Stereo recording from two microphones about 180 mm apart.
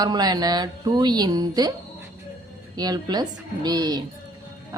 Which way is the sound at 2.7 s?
20° right (ahead or behind).